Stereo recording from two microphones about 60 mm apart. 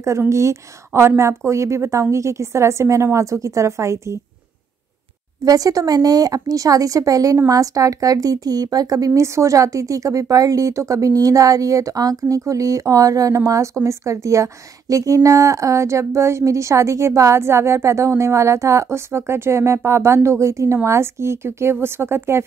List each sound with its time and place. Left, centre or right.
0.3 s a woman's voice: right
5.4 s speech: right
9.2 s a woman's voice: right